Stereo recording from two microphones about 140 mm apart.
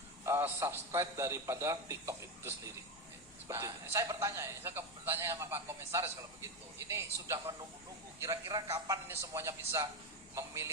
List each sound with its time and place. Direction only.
0.3 s a man's voice: 15° right (ahead or behind)